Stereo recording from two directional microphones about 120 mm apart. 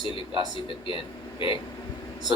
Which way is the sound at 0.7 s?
50° left (ahead or behind).